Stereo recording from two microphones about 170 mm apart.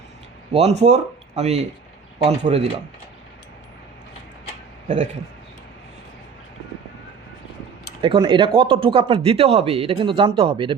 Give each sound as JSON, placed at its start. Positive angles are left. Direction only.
{"t": 0.5, "sound": "speech", "side_deg": -40}
{"t": 8.0, "sound": "speech", "side_deg": -30}